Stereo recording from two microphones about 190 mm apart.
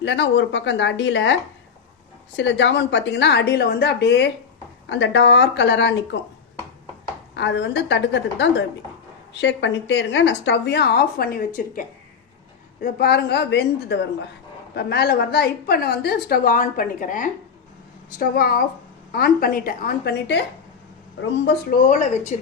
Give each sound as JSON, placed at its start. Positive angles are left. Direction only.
{"t": 0.0, "sound": "a woman's voice", "side_deg": 65}
{"t": 7.3, "sound": "a woman's voice", "side_deg": 70}
{"t": 12.8, "sound": "a woman's voice", "side_deg": 55}
{"t": 21.7, "sound": "speech", "side_deg": 40}